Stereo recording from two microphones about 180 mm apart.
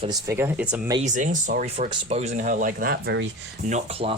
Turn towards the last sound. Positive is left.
turn(degrees=-35)  # may be behind; listen again after turning